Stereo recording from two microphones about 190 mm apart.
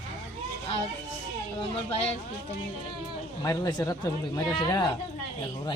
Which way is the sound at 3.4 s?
15° left (ahead or behind).